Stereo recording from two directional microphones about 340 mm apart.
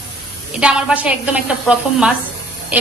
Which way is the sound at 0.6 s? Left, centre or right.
Centre.